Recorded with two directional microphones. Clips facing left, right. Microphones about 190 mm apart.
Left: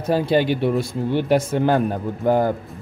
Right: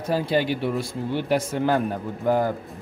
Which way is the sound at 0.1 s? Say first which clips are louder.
Left 4 dB; 25° left (ahead or behind).